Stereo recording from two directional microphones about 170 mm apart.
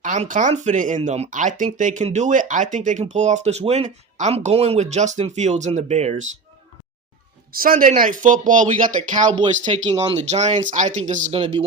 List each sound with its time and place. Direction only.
0.0 s speech: 45° right (ahead or behind)
7.5 s speech: 55° right (ahead or behind)
9.3 s speech: 30° right (ahead or behind); by 11.3 s 45° right (ahead or behind)